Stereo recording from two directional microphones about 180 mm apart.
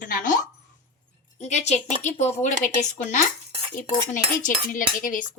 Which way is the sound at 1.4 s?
40° left (ahead or behind).